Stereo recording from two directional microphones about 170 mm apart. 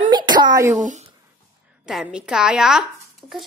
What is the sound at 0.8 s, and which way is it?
Speech, 45° right (ahead or behind).